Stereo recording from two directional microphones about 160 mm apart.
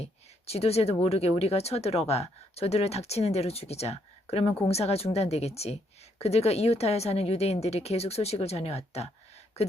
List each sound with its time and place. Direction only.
0.0 s speech: 40° left (ahead or behind)